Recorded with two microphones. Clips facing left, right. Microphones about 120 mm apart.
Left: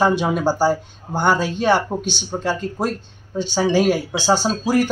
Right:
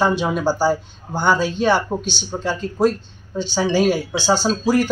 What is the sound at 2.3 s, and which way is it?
Speech, 10° left (ahead or behind).